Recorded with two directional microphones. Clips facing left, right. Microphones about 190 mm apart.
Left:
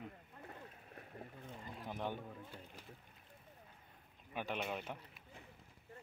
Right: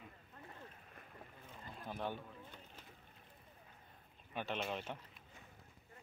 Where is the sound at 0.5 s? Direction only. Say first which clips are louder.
Left 3 dB; 40° left (ahead or behind).